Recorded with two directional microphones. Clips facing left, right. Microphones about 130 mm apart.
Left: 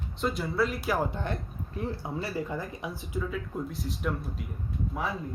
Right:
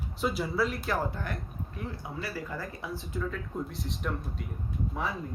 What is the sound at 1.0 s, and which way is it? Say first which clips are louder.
Speech: left 3 dB; 25° left (ahead or behind).